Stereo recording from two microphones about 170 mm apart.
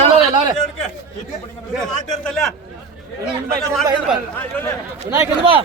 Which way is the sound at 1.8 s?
5° left (ahead or behind).